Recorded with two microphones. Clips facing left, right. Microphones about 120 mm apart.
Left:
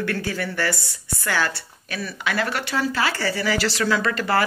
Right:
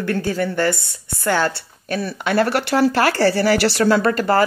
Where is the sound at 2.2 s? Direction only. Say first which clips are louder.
Right 7 dB; 45° right (ahead or behind); by 3.8 s 65° right (ahead or behind).